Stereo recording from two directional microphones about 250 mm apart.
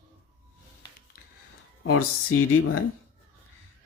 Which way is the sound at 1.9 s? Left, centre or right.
Left.